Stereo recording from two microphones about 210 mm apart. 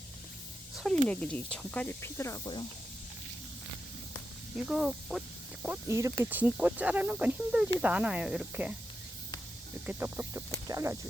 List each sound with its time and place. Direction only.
1.0 s speech: 5° left (ahead or behind)
4.5 s speech: centre (ahead or behind)
9.8 s speech: 5° right (ahead or behind)